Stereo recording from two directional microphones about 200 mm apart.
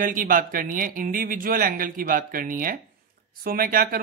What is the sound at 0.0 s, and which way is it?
Speech, 45° right (ahead or behind).